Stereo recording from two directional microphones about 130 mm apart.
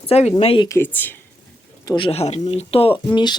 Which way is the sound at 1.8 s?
35° left (ahead or behind).